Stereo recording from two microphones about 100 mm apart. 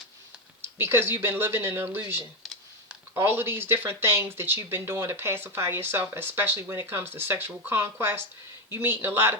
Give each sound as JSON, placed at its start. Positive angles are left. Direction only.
{"t": 0.6, "sound": "speech", "side_deg": -25}
{"t": 2.4, "sound": "computer keyboard", "side_deg": 0}
{"t": 3.2, "sound": "speech", "side_deg": -25}